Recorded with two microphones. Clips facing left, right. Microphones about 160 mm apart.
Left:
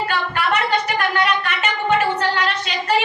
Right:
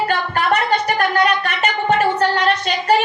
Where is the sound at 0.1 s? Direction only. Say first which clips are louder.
Right 3 dB; 45° right (ahead or behind).